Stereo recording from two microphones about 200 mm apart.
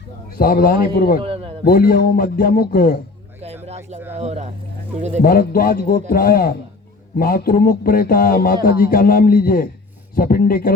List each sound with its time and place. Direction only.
0.3 s a man's voice: 45° left (ahead or behind)
1.2 s a sound: 30° right (ahead or behind)
1.6 s a man's voice: 45° left (ahead or behind)
3.4 s a sound: 30° right (ahead or behind)
4.1 s speech: 35° right (ahead or behind)
5.2 s a man's voice: 45° left (ahead or behind)